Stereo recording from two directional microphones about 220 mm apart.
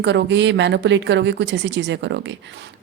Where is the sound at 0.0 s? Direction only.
55° right (ahead or behind).